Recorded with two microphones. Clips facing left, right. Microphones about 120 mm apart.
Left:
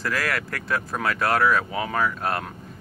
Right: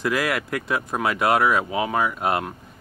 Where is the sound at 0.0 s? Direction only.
20° right (ahead or behind).